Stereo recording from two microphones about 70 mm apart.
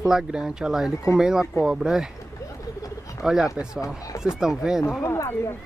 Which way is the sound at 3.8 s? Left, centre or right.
Left.